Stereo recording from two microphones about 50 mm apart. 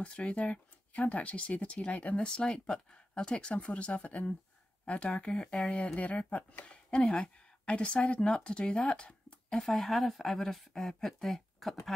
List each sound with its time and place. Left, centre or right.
0.0 s speech: left
2.2 s speech: centre
9.7 s speech: centre